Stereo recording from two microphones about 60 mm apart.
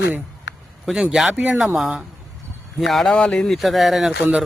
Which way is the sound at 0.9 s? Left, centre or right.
Centre.